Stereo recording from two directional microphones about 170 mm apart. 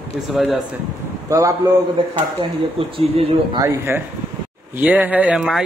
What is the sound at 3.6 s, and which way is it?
A man's voice, 15° right (ahead or behind).